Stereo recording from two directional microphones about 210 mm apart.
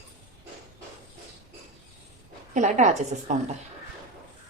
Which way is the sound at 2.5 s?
35° right (ahead or behind).